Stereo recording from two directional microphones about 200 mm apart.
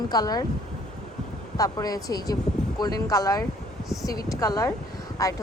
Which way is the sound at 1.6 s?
15° left (ahead or behind).